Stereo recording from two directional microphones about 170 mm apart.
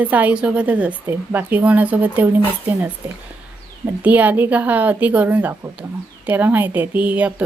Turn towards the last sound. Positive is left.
turn(degrees=-5)  # may be behind; listen again after turning